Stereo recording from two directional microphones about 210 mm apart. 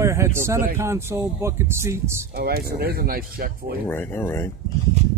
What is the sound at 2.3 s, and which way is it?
Speech, 45° right (ahead or behind).